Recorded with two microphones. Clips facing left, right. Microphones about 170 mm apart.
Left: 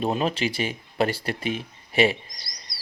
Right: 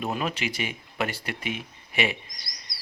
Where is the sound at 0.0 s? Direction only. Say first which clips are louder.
Left 5 dB; 30° left (ahead or behind).